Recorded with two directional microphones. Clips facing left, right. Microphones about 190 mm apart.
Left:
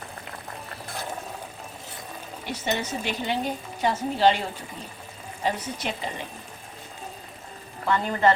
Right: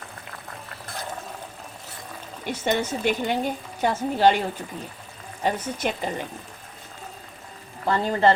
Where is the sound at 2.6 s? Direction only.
50° right (ahead or behind).